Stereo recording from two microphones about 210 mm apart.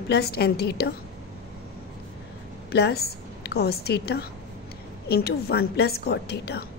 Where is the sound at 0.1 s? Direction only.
50° left (ahead or behind).